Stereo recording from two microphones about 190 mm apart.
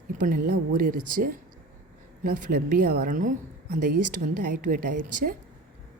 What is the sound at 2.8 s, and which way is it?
Speech, 45° right (ahead or behind).